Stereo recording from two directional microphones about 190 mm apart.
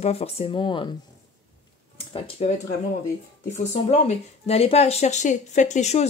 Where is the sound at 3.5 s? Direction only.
35° left (ahead or behind).